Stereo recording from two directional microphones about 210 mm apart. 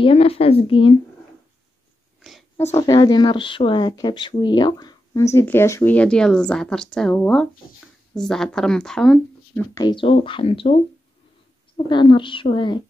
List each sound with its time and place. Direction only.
0.0 s speech: 25° left (ahead or behind)
2.2 s a sound: centre (ahead or behind)
2.6 s a woman's voice: 15° left (ahead or behind)
9.8 s speech: 20° left (ahead or behind)
11.9 s speech: 20° left (ahead or behind)